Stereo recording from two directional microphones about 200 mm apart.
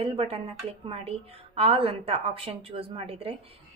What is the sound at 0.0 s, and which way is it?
A woman's voice, 30° right (ahead or behind).